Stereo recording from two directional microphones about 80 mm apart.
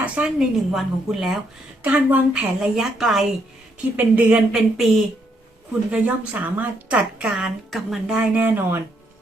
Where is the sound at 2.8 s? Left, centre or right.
Centre.